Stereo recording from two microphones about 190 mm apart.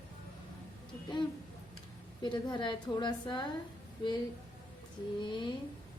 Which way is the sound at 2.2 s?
25° left (ahead or behind).